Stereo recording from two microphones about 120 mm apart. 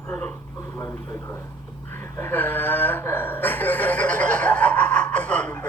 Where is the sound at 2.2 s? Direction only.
15° left (ahead or behind).